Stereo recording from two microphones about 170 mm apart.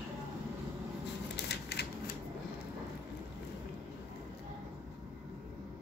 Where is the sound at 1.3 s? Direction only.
70° left (ahead or behind).